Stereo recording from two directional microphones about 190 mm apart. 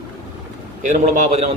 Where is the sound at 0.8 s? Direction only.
40° right (ahead or behind).